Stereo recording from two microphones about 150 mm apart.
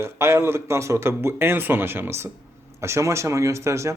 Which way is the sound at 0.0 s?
15° right (ahead or behind).